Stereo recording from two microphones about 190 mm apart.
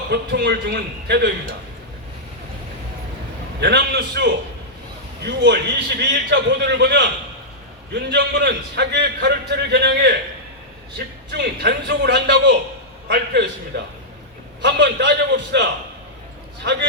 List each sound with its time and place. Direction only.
0.1 s a man's voice: 60° right (ahead or behind)
3.6 s a man's voice: 65° right (ahead or behind)